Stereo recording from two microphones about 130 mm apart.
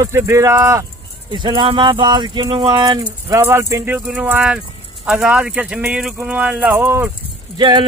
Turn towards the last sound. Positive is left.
turn(degrees=-35)  # may be behind; listen again after turning